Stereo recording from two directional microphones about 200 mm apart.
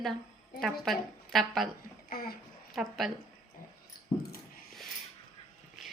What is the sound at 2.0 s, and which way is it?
Speech, 50° left (ahead or behind).